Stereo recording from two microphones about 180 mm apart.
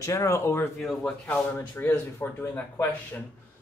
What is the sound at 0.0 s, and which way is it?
Speech, 15° left (ahead or behind).